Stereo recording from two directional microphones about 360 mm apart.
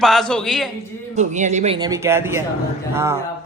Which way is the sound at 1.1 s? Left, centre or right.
Centre.